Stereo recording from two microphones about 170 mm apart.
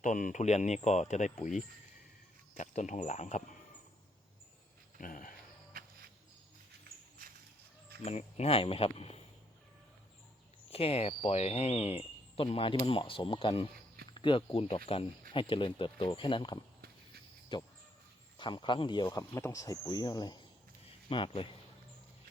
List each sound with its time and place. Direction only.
0.0 s speech: 50° left (ahead or behind)
4.9 s a sound: 50° left (ahead or behind)
8.0 s speech: 40° left (ahead or behind)
10.7 s speech: 35° left (ahead or behind)